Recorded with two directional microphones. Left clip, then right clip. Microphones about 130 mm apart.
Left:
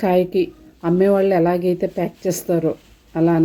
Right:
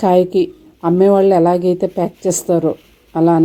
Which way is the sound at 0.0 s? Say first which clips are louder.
Right 5 dB; 20° right (ahead or behind).